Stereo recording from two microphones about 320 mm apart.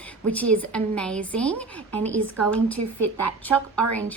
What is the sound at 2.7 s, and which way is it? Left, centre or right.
Speech, right.